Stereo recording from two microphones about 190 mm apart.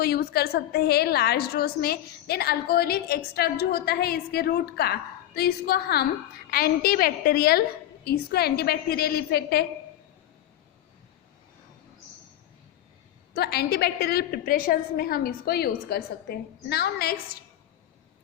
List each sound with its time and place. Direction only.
0.0 s a woman's voice: 55° left (ahead or behind)
13.3 s a woman's voice: 55° left (ahead or behind)